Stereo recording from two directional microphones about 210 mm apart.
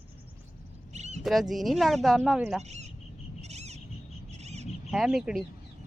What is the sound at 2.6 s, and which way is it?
Speech, 30° right (ahead or behind).